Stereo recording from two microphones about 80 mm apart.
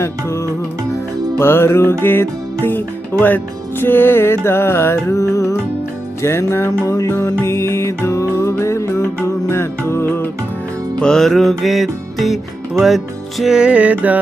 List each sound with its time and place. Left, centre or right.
0.0 s music: left
11.0 s music: centre